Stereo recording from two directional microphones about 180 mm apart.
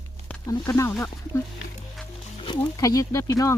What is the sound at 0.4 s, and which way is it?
Speech, 20° left (ahead or behind).